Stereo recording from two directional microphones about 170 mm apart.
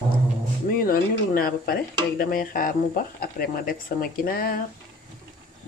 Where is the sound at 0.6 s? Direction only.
60° left (ahead or behind).